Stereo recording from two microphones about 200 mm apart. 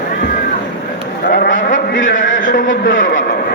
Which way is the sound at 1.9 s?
70° left (ahead or behind).